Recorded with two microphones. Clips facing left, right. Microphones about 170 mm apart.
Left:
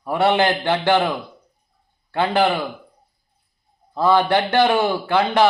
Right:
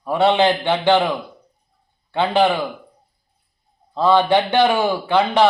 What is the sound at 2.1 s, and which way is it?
Speech, 15° right (ahead or behind).